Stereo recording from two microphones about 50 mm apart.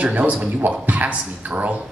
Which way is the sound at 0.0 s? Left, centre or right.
Right.